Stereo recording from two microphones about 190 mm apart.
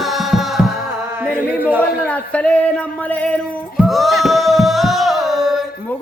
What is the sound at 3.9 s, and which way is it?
Music, centre (ahead or behind).